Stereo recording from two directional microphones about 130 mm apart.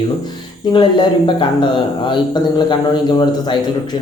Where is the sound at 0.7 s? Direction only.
35° left (ahead or behind).